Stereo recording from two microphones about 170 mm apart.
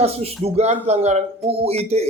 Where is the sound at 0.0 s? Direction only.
40° right (ahead or behind).